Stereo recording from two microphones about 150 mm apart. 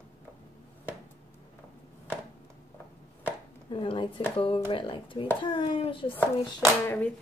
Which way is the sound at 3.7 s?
35° left (ahead or behind).